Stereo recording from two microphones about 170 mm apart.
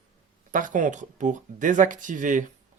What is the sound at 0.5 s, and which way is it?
Speech, 50° right (ahead or behind).